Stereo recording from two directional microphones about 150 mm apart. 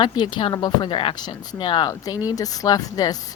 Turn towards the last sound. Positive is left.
turn(degrees=25)  # may be behind; listen again after turning